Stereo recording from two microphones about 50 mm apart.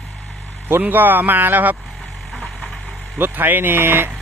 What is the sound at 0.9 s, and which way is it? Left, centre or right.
Speech, right.